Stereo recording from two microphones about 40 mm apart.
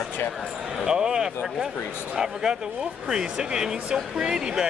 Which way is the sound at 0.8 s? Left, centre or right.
Centre.